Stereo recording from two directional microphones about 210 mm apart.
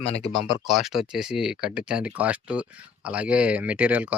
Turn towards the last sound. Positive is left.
turn(degrees=-5)  # may be behind; listen again after turning